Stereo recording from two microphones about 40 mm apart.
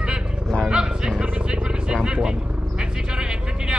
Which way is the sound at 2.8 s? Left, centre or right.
Right.